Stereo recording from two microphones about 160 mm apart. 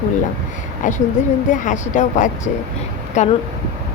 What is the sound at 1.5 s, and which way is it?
A woman's voice, 50° left (ahead or behind).